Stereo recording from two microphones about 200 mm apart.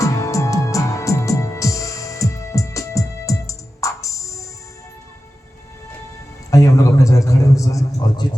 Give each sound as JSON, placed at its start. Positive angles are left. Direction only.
{"t": 0.0, "sound": "music", "side_deg": 15}
{"t": 6.5, "sound": "a man's voice", "side_deg": 15}